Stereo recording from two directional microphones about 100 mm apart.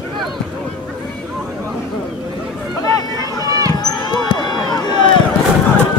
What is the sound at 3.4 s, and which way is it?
Basketball bounce, 35° right (ahead or behind).